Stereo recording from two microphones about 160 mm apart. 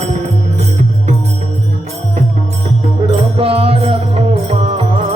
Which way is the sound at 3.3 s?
35° right (ahead or behind).